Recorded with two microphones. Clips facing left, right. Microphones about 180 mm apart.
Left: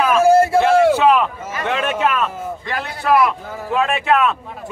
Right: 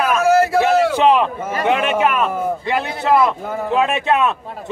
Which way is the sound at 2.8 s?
20° right (ahead or behind).